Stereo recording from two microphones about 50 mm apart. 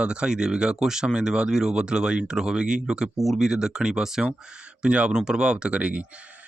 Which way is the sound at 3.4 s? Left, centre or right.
Centre.